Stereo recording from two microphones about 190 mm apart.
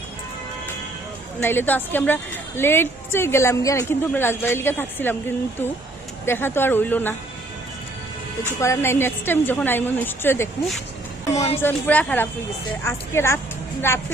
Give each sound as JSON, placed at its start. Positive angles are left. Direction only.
{"t": 1.4, "sound": "a woman's voice", "side_deg": 10}
{"t": 6.2, "sound": "a woman's voice", "side_deg": 10}
{"t": 8.4, "sound": "a woman's voice", "side_deg": 15}
{"t": 11.3, "sound": "a woman's voice", "side_deg": 30}
{"t": 11.6, "sound": "a woman's voice", "side_deg": 10}